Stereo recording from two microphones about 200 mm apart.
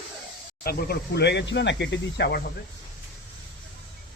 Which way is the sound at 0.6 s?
55° left (ahead or behind).